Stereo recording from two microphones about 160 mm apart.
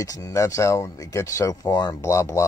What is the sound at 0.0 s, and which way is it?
Speech, 20° left (ahead or behind).